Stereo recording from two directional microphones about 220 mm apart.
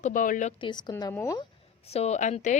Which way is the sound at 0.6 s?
20° left (ahead or behind).